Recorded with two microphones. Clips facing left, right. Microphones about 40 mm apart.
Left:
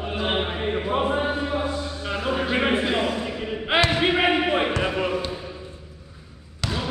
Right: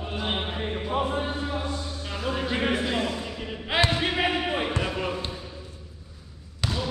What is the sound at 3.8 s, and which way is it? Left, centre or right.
Basketball bounce, left.